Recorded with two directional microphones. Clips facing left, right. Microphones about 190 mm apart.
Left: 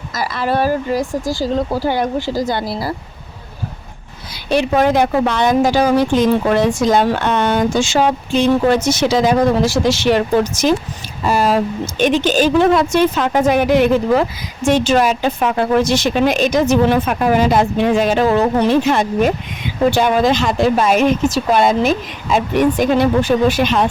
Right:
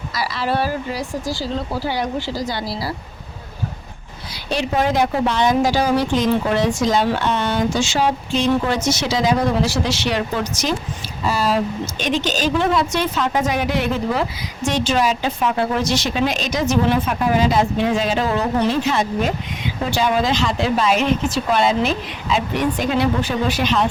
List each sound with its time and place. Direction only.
0.2 s a woman's voice: 50° left (ahead or behind)
4.4 s a woman's voice: 60° left (ahead or behind)